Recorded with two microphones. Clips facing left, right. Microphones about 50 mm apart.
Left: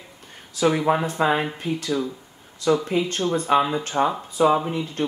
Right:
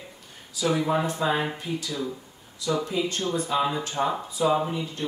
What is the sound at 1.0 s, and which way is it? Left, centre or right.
Speech, left.